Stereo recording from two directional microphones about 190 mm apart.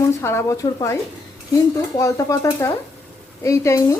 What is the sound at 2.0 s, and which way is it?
A woman's voice, 20° left (ahead or behind).